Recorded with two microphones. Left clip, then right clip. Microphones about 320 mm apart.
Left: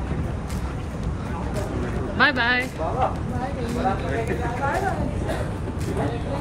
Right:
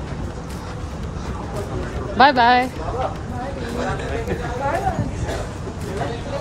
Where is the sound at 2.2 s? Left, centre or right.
Centre.